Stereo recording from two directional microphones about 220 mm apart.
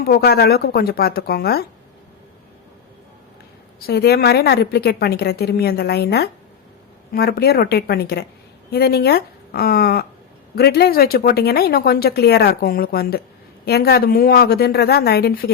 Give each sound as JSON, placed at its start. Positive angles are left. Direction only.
{"t": 0.0, "sound": "speech", "side_deg": 45}
{"t": 3.8, "sound": "speech", "side_deg": 45}